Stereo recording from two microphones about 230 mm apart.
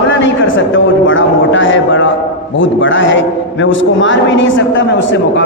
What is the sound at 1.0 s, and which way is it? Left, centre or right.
A man's voice, left.